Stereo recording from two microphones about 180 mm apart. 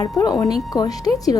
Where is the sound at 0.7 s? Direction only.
5° right (ahead or behind).